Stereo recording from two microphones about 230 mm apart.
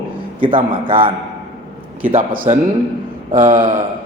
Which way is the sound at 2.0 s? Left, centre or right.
Right.